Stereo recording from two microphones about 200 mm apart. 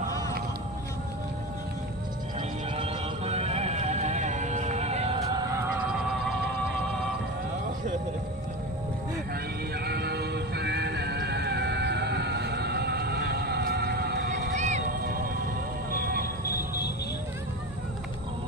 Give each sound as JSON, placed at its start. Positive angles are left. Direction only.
{"t": 2.7, "sound": "music", "side_deg": -30}
{"t": 9.8, "sound": "music", "side_deg": -55}
{"t": 14.5, "sound": "run", "side_deg": -35}
{"t": 15.9, "sound": "a sound", "side_deg": -50}